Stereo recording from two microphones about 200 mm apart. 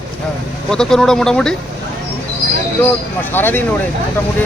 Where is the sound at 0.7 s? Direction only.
5° left (ahead or behind).